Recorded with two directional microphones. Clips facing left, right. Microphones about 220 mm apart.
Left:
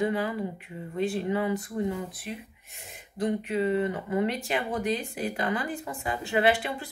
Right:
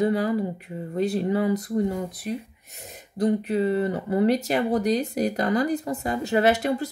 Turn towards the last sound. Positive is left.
turn(degrees=-40)  # may be behind; listen again after turning